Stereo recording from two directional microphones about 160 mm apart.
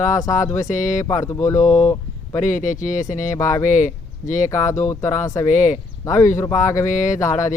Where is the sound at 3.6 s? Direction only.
50° left (ahead or behind).